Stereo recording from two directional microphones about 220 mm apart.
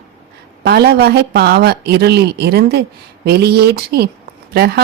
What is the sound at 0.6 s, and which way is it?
Speech, 45° right (ahead or behind).